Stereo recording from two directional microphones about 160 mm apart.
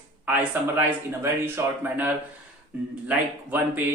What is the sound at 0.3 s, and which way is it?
Speech, 10° right (ahead or behind).